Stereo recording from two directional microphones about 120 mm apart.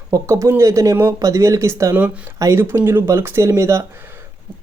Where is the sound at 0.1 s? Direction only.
25° right (ahead or behind).